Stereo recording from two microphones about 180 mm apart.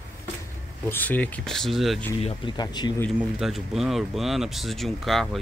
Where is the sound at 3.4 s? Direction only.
Centre (ahead or behind).